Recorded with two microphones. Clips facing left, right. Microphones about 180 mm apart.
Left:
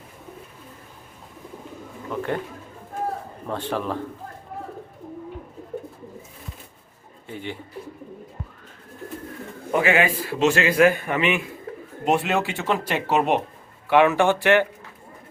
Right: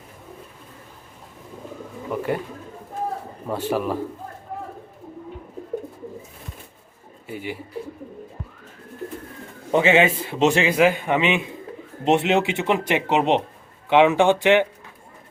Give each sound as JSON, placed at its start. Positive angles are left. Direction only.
{"t": 2.1, "sound": "speech", "side_deg": -10}
{"t": 3.4, "sound": "speech", "side_deg": -10}
{"t": 7.3, "sound": "speech", "side_deg": -10}
{"t": 9.7, "sound": "a man's voice", "side_deg": -25}